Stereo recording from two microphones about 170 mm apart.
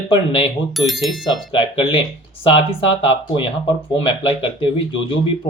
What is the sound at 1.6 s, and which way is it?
Speech, 30° left (ahead or behind).